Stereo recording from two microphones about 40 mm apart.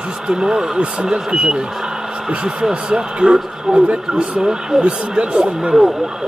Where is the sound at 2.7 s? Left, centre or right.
Right.